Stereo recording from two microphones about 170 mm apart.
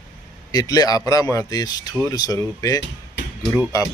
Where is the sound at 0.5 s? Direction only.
20° left (ahead or behind).